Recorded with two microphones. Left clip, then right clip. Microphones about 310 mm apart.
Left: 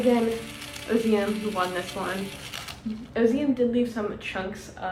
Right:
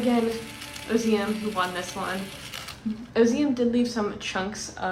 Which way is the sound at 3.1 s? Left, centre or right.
Centre.